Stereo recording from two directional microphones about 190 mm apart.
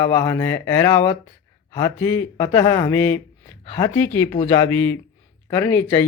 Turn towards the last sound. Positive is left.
turn(degrees=15)  # may be behind; listen again after turning